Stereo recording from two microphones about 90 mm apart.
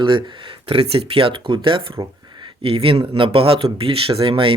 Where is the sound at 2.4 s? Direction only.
90° right.